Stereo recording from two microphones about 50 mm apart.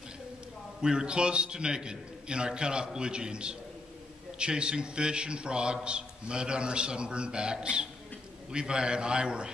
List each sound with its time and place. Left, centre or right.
0.7 s a man's voice: centre